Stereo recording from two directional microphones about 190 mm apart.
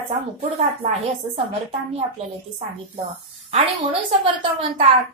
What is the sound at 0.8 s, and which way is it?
Speech, 35° right (ahead or behind).